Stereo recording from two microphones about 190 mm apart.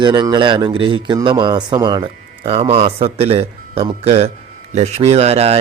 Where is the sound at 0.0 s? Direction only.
25° right (ahead or behind).